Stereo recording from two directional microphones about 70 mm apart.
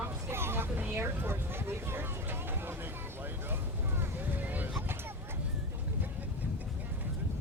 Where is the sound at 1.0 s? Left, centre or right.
Right.